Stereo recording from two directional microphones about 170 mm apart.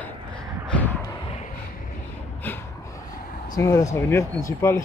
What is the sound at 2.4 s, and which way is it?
Gasp, 10° left (ahead or behind).